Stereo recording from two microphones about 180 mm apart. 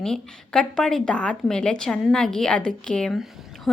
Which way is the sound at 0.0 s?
5° left (ahead or behind).